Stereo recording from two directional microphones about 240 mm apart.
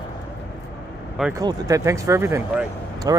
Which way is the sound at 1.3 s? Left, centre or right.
Centre.